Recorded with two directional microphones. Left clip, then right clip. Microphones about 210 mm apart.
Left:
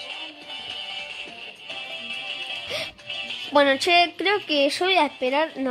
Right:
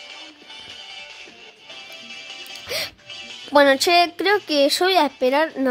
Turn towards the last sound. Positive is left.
turn(degrees=-35)  # may be behind; listen again after turning